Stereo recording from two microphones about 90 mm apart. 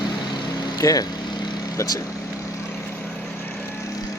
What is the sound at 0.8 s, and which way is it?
Speech, 40° left (ahead or behind).